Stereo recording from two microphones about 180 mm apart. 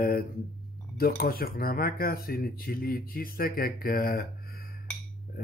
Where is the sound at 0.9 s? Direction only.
55° left (ahead or behind).